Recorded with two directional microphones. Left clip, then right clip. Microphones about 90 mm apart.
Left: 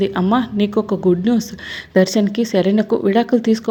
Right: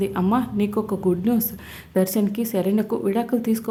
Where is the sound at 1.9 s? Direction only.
35° left (ahead or behind).